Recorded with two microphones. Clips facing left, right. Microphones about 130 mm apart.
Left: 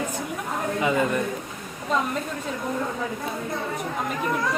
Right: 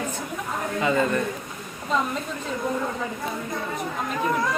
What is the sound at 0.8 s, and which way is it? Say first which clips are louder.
Speech: right 1 dB; 15° left (ahead or behind).